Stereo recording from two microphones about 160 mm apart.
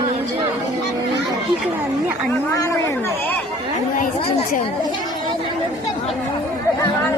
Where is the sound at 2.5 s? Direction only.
20° left (ahead or behind).